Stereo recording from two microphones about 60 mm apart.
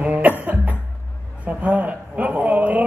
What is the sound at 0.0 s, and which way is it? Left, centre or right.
Music, right.